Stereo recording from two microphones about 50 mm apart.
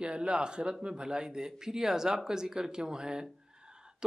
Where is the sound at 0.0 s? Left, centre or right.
Right.